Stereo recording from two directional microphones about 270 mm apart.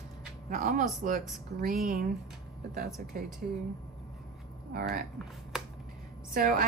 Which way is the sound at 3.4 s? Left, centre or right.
Right.